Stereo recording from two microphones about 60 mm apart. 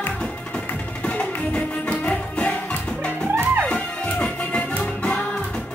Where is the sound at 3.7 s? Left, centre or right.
Centre.